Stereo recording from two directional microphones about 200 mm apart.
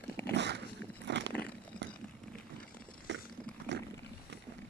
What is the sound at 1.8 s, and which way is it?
Vehicle, 60° right (ahead or behind).